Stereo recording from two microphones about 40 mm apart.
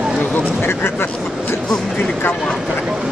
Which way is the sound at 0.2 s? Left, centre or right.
Left.